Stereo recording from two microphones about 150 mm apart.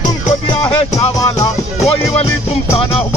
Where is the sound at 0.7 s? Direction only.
30° left (ahead or behind).